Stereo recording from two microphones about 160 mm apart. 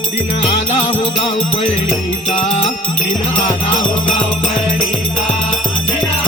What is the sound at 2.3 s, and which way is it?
Music, 45° left (ahead or behind).